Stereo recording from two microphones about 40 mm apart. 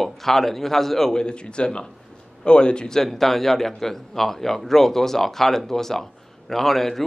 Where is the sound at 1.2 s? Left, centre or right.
Left.